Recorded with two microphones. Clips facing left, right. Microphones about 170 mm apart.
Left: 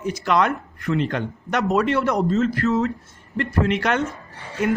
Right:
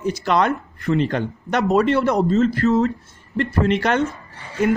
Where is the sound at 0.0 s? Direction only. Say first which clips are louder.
Right 1 dB; 30° right (ahead or behind).